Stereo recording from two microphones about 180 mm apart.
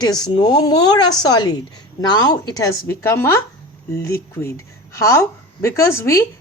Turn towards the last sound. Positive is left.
turn(degrees=15)  # may be behind; listen again after turning